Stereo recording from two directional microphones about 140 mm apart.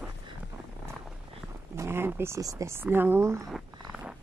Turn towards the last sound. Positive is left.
turn(degrees=-5)  # may be behind; listen again after turning